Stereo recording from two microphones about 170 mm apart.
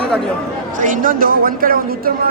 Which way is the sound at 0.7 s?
50° right (ahead or behind).